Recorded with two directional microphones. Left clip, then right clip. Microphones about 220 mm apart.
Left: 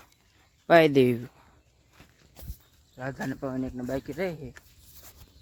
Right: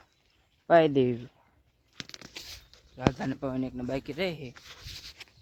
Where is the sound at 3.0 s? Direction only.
10° right (ahead or behind).